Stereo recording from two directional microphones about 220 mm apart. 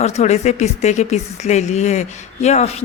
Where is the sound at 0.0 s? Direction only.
30° left (ahead or behind).